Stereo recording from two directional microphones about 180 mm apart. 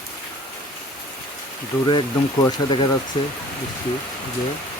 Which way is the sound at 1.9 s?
25° left (ahead or behind).